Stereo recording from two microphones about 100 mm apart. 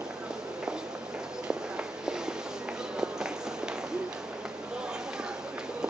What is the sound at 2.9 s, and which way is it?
Run, 5° right (ahead or behind).